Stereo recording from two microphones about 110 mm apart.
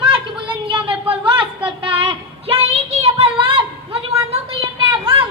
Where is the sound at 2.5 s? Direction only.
75° right (ahead or behind).